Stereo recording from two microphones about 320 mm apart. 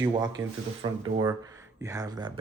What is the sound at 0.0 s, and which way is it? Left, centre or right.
Speech, centre.